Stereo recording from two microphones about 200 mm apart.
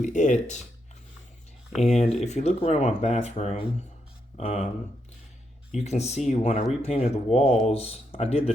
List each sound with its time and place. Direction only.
0.0 s speech: 40° left (ahead or behind)
1.8 s speech: 35° left (ahead or behind)
5.7 s speech: 35° left (ahead or behind)